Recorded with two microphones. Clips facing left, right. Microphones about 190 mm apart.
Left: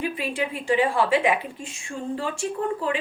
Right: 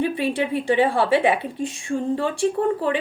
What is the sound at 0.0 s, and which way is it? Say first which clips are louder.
A woman's voice: right 5 dB; 30° right (ahead or behind).